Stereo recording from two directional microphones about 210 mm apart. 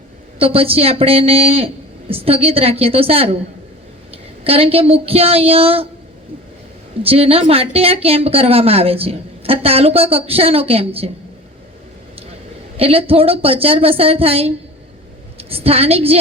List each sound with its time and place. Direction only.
0.3 s a woman's voice: 25° right (ahead or behind)
7.0 s speech: 25° right (ahead or behind)
12.7 s a woman's voice: 25° right (ahead or behind)